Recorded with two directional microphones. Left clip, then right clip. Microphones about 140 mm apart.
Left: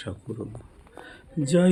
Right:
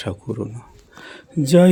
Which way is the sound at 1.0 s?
45° right (ahead or behind).